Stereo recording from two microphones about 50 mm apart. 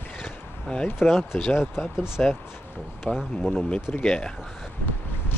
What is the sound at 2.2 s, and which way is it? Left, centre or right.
Speech, centre.